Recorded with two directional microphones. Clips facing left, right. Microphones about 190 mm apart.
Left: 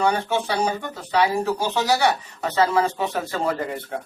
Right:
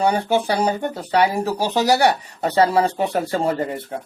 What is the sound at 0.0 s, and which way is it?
Speech, 35° right (ahead or behind).